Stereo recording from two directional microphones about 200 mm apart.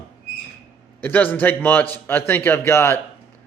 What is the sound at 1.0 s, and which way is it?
A man's voice, 10° left (ahead or behind).